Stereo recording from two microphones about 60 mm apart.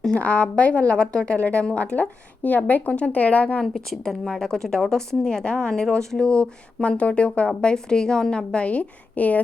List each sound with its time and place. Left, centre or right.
0.1 s a woman's voice: left
3.7 s a woman's voice: centre; by 9.4 s left